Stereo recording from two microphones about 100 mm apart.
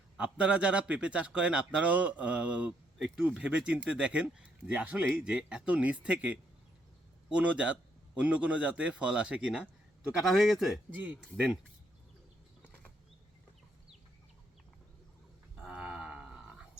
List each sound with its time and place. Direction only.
0.2 s a man's voice: 10° right (ahead or behind)
10.9 s a man's voice: 15° right (ahead or behind)
15.5 s a sound: 5° right (ahead or behind)